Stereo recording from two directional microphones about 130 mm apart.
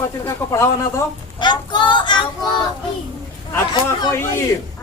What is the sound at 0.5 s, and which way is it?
Speech, 20° left (ahead or behind).